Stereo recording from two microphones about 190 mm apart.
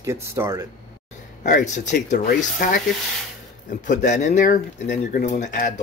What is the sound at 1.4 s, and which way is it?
Speech, 40° left (ahead or behind).